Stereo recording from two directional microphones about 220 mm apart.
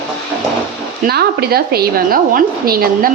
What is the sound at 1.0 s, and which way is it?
A woman's voice, 45° right (ahead or behind).